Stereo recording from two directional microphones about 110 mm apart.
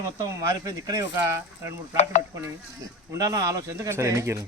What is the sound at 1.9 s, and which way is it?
Speech, 90° left.